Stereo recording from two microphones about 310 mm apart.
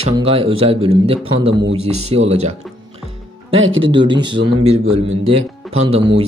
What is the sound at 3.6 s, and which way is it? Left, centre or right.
Speech, right.